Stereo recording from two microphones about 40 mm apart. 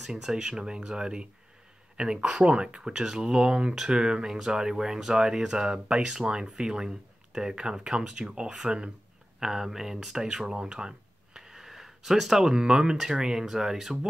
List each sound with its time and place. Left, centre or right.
0.0 s speech: centre
9.4 s speech: centre
11.3 s a sound: centre
12.9 s speech: centre